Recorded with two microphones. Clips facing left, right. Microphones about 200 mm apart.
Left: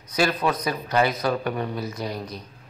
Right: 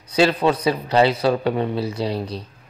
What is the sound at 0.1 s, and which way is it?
A man's voice, 30° right (ahead or behind).